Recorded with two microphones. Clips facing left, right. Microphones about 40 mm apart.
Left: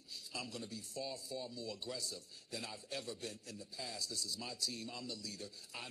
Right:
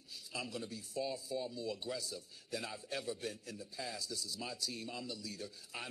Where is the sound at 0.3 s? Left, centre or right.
Centre.